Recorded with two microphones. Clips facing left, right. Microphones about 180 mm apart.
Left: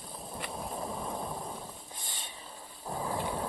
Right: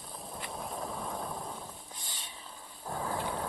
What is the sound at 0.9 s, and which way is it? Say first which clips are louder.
Vehicle: left 1 dB; 10° left (ahead or behind).